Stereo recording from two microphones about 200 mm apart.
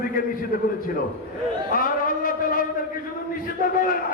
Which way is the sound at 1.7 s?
45° left (ahead or behind).